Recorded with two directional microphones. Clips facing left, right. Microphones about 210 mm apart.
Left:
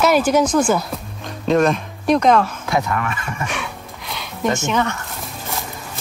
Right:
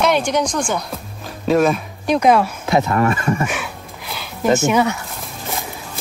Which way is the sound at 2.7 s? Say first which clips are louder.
Right 3 dB; 25° right (ahead or behind).